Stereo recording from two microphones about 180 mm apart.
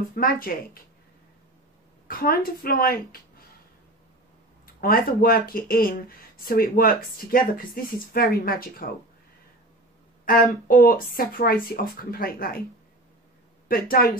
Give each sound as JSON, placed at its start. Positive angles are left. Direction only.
{"t": 0.1, "sound": "speech", "side_deg": 55}
{"t": 2.0, "sound": "speech", "side_deg": 55}
{"t": 4.7, "sound": "speech", "side_deg": 55}
{"t": 10.2, "sound": "speech", "side_deg": 50}
{"t": 13.7, "sound": "speech", "side_deg": 55}